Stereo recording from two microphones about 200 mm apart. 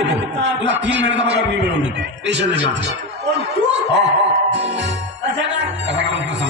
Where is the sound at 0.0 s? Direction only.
60° right (ahead or behind).